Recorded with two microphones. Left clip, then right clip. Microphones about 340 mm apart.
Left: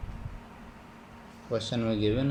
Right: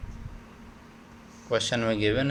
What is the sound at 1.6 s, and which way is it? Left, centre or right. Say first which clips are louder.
Speech: right 5 dB; right.